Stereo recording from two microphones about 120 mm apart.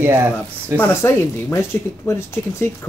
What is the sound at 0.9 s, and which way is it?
Speech, 20° left (ahead or behind).